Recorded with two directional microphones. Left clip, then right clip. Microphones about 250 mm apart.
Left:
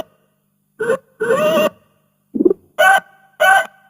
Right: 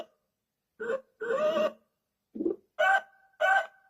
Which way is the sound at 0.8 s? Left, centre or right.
Left.